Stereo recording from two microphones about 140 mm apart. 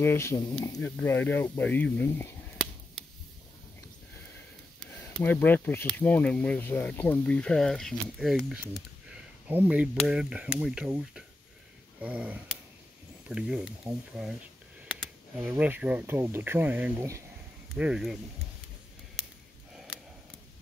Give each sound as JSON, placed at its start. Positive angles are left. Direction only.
{"t": 0.0, "sound": "speech", "side_deg": 20}
{"t": 0.7, "sound": "speech", "side_deg": 10}
{"t": 5.0, "sound": "speech", "side_deg": 15}
{"t": 9.5, "sound": "a sound", "side_deg": -10}
{"t": 10.0, "sound": "speech", "side_deg": -5}
{"t": 12.0, "sound": "a sound", "side_deg": -10}
{"t": 14.9, "sound": "speech", "side_deg": -10}
{"t": 17.7, "sound": "speech", "side_deg": -5}